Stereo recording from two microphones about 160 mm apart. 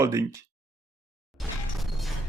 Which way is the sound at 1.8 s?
Centre (ahead or behind).